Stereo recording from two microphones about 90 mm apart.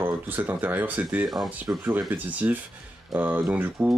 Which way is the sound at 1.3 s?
Centre (ahead or behind).